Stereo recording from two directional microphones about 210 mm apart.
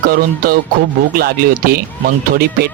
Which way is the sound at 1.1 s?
45° right (ahead or behind).